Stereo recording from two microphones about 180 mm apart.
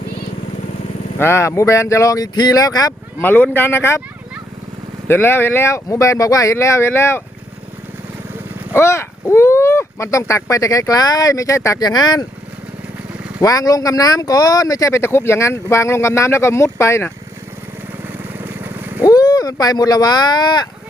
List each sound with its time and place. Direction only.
1.2 s speech: 15° left (ahead or behind)
5.0 s speech: 10° left (ahead or behind)
8.7 s speech: 15° left (ahead or behind)
13.4 s speech: 20° left (ahead or behind)
18.3 s vehicle: 10° right (ahead or behind)
19.0 s speech: 20° left (ahead or behind)